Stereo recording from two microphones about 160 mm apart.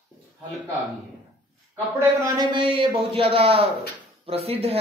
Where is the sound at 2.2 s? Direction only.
25° right (ahead or behind).